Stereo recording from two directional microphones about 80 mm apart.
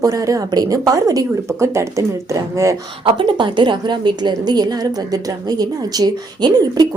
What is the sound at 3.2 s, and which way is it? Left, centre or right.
A woman's voice, right.